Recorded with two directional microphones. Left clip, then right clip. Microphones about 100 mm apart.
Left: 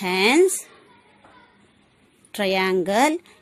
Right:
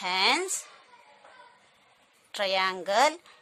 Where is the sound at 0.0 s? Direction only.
30° left (ahead or behind).